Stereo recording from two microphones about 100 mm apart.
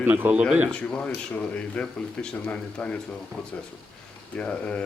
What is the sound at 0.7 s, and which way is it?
Speech, 10° left (ahead or behind).